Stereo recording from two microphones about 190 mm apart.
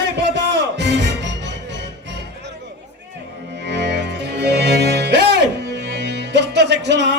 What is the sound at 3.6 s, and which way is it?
Music, 65° right (ahead or behind).